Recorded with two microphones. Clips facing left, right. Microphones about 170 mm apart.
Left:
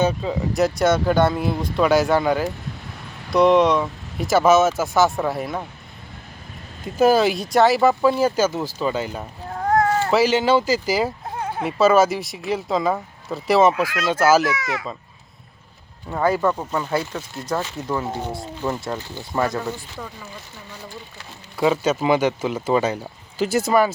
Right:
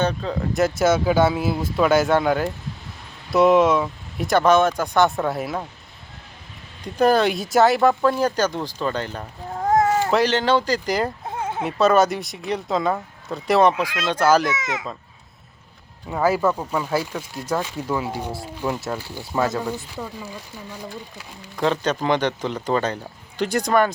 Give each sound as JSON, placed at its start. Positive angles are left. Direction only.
{"t": 0.0, "sound": "speech", "side_deg": 10}
{"t": 6.8, "sound": "speech", "side_deg": 5}
{"t": 9.8, "sound": "cat", "side_deg": -10}
{"t": 10.1, "sound": "speech", "side_deg": 5}
{"t": 14.5, "sound": "speech", "side_deg": -20}
{"t": 16.0, "sound": "speech", "side_deg": -5}
{"t": 21.6, "sound": "speech", "side_deg": 5}